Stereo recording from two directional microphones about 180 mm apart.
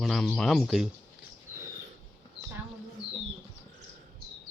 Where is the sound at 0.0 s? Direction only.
Centre (ahead or behind).